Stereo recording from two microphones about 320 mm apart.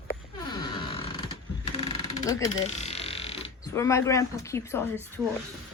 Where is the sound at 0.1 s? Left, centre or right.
Centre.